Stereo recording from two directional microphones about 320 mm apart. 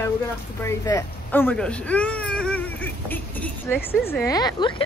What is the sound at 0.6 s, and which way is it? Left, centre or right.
Speech, centre.